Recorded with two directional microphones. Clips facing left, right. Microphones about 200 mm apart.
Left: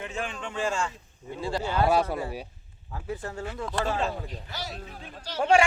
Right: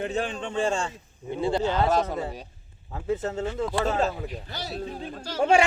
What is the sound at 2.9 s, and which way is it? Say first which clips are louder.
Speech: right 7 dB; 20° right (ahead or behind).